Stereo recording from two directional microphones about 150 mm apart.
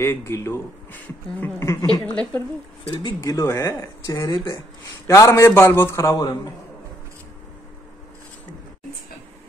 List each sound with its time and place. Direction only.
0.0 s a man's voice: 15° left (ahead or behind)
2.0 s a man's voice: 10° left (ahead or behind)
2.9 s a man's voice: 30° left (ahead or behind)